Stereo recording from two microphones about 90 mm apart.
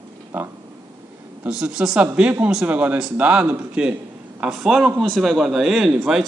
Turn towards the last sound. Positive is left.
turn(degrees=-5)  # may be behind; listen again after turning